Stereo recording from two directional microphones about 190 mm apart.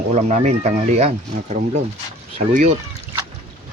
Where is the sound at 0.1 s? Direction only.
40° right (ahead or behind).